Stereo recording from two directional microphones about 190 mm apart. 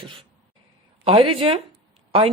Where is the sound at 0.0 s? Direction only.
25° right (ahead or behind).